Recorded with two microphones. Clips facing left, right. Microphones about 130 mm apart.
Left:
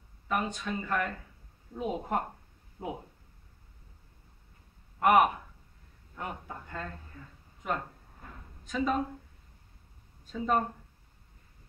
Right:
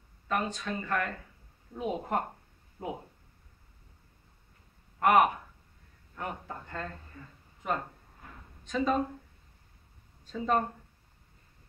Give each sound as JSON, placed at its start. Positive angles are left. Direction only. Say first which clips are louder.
{"t": 0.3, "sound": "a man's voice", "louder": "even", "side_deg": 10}
{"t": 2.8, "sound": "speech", "louder": "even", "side_deg": 15}
{"t": 5.0, "sound": "a man's voice", "louder": "even", "side_deg": 15}
{"t": 8.6, "sound": "a man's voice", "louder": "right 1 dB", "side_deg": 5}
{"t": 10.3, "sound": "a man's voice", "louder": "even", "side_deg": 5}